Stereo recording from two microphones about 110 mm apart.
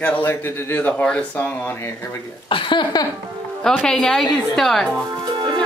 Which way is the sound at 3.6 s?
5° left (ahead or behind).